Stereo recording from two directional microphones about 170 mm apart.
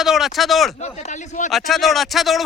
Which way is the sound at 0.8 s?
45° left (ahead or behind).